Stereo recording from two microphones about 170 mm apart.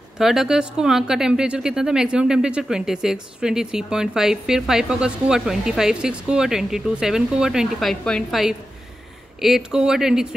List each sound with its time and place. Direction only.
0.2 s speech: centre (ahead or behind)